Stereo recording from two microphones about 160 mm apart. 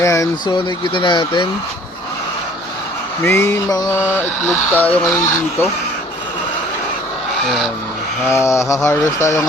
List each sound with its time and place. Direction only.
0.0 s speech: 20° left (ahead or behind)
3.2 s speech: 15° left (ahead or behind)
7.4 s speech: centre (ahead or behind)
8.3 s speech: 15° left (ahead or behind)